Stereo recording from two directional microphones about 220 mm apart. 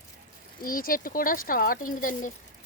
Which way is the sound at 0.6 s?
40° left (ahead or behind).